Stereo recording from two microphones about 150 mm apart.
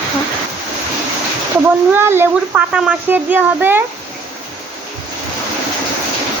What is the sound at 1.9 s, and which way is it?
A child's voice, 15° right (ahead or behind).